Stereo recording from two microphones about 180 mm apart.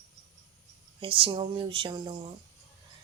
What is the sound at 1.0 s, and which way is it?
Speech, 30° right (ahead or behind).